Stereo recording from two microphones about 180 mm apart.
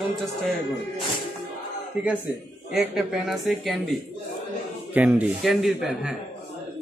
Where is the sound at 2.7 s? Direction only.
Centre (ahead or behind).